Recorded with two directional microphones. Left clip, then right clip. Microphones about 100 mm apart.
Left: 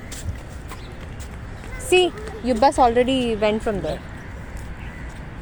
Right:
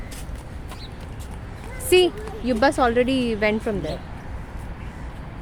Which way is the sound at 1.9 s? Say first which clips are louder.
Even; 20° right (ahead or behind).